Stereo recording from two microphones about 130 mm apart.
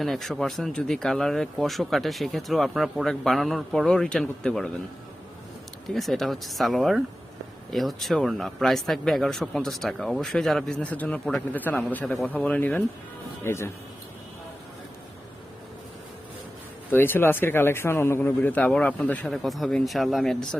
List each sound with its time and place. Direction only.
0.0 s speech: centre (ahead or behind)
5.9 s speech: centre (ahead or behind); by 13.7 s 20° left (ahead or behind)
16.9 s speech: 15° left (ahead or behind)